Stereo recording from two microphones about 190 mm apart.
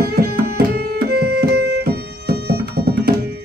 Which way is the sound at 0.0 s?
55° right (ahead or behind).